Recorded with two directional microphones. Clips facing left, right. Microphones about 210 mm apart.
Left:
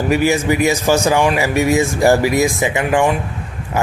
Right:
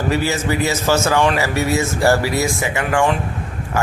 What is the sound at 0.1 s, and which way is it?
Speech, 15° left (ahead or behind).